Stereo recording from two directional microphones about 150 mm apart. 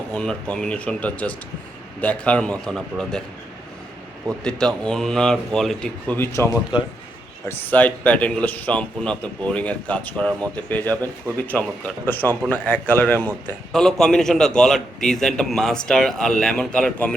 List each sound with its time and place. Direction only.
0.1 s speech: 5° left (ahead or behind)
4.3 s a man's voice: 5° left (ahead or behind)
11.3 s speech: 15° right (ahead or behind)
12.0 s a man's voice: 10° left (ahead or behind)